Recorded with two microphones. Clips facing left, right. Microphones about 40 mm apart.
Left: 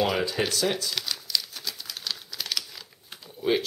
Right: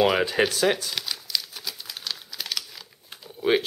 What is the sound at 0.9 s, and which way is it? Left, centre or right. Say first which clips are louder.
Crumpling: even; centre.